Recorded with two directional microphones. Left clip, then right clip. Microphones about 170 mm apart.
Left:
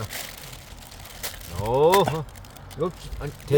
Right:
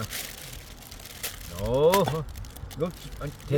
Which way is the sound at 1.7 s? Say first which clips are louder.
Left 3 dB; 55° left (ahead or behind).